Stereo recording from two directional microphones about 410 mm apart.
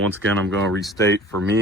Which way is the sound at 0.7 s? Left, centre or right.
Centre.